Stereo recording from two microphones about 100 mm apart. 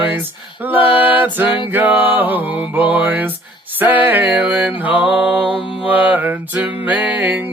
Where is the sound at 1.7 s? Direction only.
20° right (ahead or behind).